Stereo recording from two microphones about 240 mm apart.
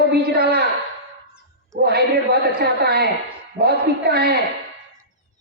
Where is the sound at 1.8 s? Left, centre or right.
Right.